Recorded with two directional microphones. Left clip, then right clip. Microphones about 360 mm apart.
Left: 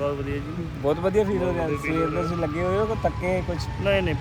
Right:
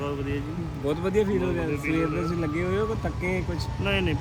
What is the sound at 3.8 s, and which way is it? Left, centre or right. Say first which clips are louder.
Speech: left 4 dB; centre.